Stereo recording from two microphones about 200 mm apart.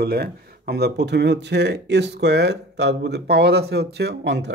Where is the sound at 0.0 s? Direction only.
50° right (ahead or behind).